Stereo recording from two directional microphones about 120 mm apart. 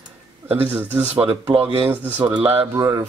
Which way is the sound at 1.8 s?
15° right (ahead or behind).